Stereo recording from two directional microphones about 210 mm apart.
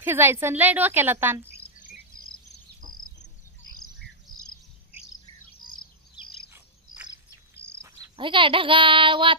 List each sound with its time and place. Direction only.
0.0 s a woman's voice: 10° right (ahead or behind)
4.3 s chirp: 20° left (ahead or behind)
6.5 s cricket: 5° right (ahead or behind)
7.8 s speech: 25° right (ahead or behind)